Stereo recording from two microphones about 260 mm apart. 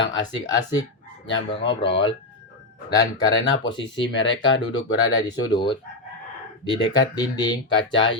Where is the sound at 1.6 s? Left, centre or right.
Centre.